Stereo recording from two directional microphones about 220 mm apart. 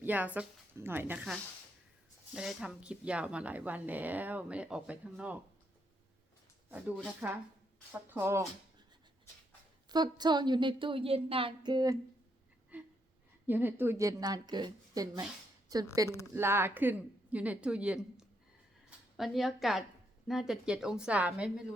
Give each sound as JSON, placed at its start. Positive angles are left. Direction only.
{"t": 0.0, "sound": "a woman's voice", "side_deg": -5}
{"t": 6.7, "sound": "a woman's voice", "side_deg": -5}
{"t": 8.1, "sound": "a woman's voice", "side_deg": -10}
{"t": 9.9, "sound": "a woman's voice", "side_deg": -20}
{"t": 12.7, "sound": "a sound", "side_deg": -5}
{"t": 13.5, "sound": "a woman's voice", "side_deg": -10}